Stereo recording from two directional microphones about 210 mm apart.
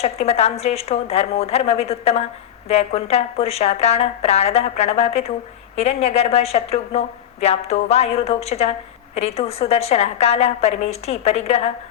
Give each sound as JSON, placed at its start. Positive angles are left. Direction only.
{"t": 0.0, "sound": "a woman's voice", "side_deg": 30}